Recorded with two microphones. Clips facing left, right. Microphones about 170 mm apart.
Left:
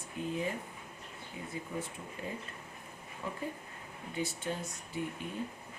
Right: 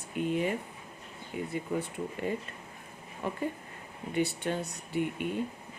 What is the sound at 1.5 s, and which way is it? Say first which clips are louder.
Speech: right 5 dB; 70° right (ahead or behind).